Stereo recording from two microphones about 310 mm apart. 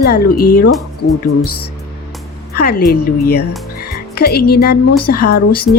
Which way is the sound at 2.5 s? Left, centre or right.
Left.